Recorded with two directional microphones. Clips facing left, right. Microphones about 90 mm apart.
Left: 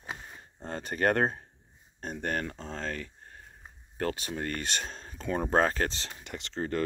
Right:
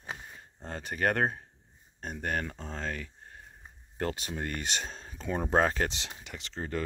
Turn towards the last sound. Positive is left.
turn(degrees=-5)  # may be behind; listen again after turning